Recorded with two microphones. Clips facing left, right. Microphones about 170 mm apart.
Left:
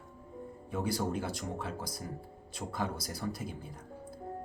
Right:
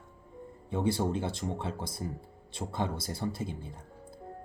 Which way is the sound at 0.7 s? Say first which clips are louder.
Right 4 dB; 25° right (ahead or behind).